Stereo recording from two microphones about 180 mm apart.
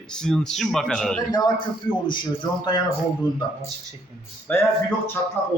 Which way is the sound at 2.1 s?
25° left (ahead or behind).